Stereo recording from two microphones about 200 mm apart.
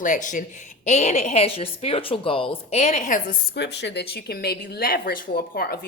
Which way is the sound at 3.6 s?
60° left (ahead or behind).